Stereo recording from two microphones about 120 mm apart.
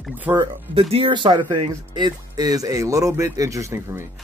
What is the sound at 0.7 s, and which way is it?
Speech, 55° right (ahead or behind).